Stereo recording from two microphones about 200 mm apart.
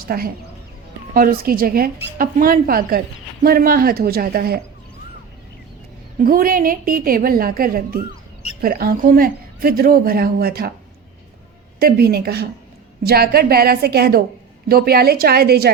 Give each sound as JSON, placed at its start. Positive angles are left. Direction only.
{"t": 0.0, "sound": "a woman's voice", "side_deg": -50}
{"t": 6.1, "sound": "a woman's voice", "side_deg": -45}
{"t": 11.8, "sound": "a woman's voice", "side_deg": -50}